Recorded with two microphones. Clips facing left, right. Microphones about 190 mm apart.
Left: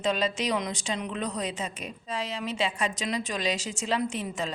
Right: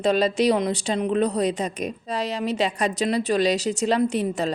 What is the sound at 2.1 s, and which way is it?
Speech, 65° right (ahead or behind).